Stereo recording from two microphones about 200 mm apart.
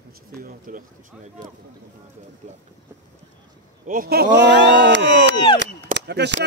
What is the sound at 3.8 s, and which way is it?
Speech, 45° right (ahead or behind).